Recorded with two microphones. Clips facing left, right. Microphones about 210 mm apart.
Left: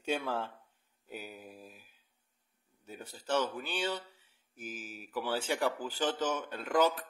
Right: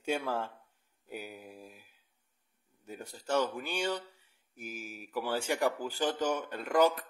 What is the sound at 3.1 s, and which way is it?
Speech, 10° right (ahead or behind).